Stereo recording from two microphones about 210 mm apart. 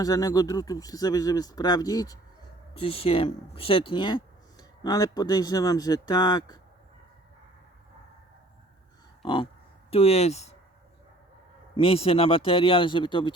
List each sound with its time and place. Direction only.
0.0 s speech: 15° left (ahead or behind)
9.2 s speech: 25° left (ahead or behind)
11.8 s speech: 25° left (ahead or behind)